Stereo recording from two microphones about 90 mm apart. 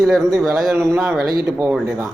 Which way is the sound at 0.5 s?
Centre (ahead or behind).